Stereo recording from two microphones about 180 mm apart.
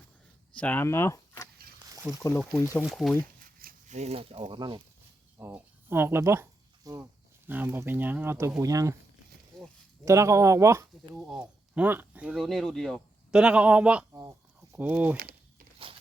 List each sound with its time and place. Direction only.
0.5 s speech: 10° left (ahead or behind)
1.8 s a sound: 15° right (ahead or behind)
2.1 s speech: 20° left (ahead or behind)
2.7 s speech: centre (ahead or behind)
3.4 s speech: 50° right (ahead or behind); by 4.8 s 25° right (ahead or behind)
5.4 s speech: 10° right (ahead or behind)
9.5 s a sound: 5° left (ahead or behind)
10.1 s speech: 15° right (ahead or behind)
11.1 s speech: centre (ahead or behind)
14.2 s speech: 20° right (ahead or behind)
15.2 s crumpling: 60° right (ahead or behind)